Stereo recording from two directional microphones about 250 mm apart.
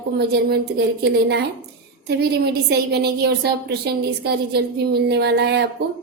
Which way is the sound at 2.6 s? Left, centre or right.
Right.